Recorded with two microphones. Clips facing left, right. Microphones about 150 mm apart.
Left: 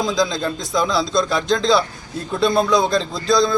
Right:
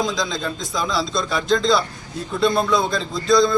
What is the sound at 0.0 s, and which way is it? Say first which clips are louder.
A man's voice: left 3 dB; centre (ahead or behind).